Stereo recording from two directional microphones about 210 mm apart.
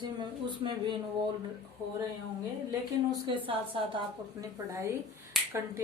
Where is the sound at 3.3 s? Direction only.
25° right (ahead or behind).